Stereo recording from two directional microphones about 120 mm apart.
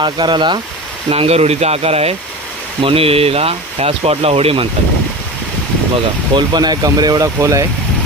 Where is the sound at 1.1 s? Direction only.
60° right (ahead or behind).